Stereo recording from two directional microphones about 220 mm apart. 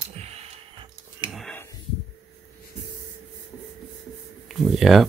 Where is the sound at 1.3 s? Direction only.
Centre (ahead or behind).